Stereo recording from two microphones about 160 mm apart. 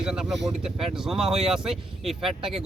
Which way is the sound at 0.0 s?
5° right (ahead or behind).